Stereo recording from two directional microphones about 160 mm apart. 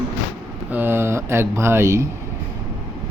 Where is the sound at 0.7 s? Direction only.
15° right (ahead or behind).